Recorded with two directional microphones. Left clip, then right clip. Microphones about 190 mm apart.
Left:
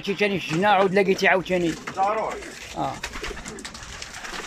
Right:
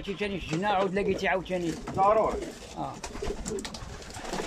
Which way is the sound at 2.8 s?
15° left (ahead or behind).